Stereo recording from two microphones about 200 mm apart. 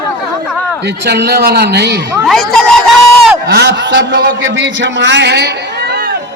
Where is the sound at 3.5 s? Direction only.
60° right (ahead or behind).